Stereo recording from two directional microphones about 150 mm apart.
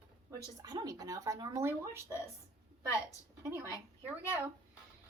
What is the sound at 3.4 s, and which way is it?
Speech, 20° right (ahead or behind).